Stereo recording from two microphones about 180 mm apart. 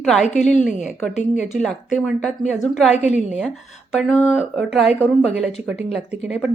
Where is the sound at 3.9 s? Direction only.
Centre (ahead or behind).